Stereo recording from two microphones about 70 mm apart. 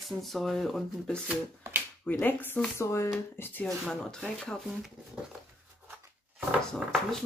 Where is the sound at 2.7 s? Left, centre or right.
Left.